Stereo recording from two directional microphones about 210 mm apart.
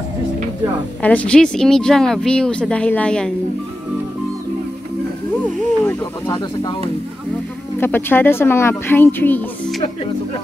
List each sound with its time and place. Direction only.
1.0 s speech: 5° left (ahead or behind)
5.4 s speech: 10° left (ahead or behind)
7.8 s speech: 10° left (ahead or behind)